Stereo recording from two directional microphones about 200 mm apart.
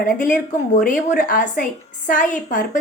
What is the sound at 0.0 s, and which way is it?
A woman's voice, 45° left (ahead or behind).